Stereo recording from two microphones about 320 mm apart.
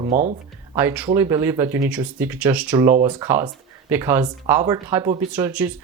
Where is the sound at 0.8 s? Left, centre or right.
Centre.